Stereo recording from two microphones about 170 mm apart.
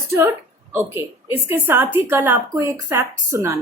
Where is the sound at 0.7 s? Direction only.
15° right (ahead or behind).